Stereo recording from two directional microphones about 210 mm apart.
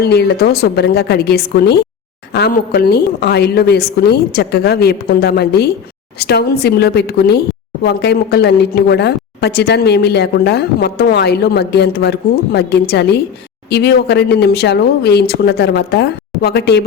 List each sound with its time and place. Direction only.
0.0 s a woman's voice: 50° left (ahead or behind)